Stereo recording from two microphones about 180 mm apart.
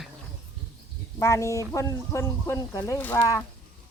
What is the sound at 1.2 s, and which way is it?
Speech, 15° left (ahead or behind).